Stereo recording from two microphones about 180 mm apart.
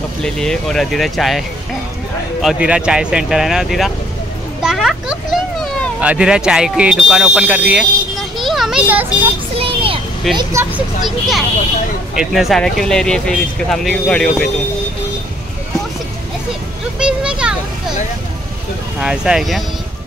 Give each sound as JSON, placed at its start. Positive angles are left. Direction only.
{"t": 0.2, "sound": "speech", "side_deg": 5}
{"t": 2.4, "sound": "a child's voice", "side_deg": -5}
{"t": 9.6, "sound": "a sound", "side_deg": -30}
{"t": 10.3, "sound": "speech", "side_deg": -15}
{"t": 11.1, "sound": "speech", "side_deg": 0}
{"t": 17.0, "sound": "vehicle", "side_deg": -5}
{"t": 18.9, "sound": "speech", "side_deg": -5}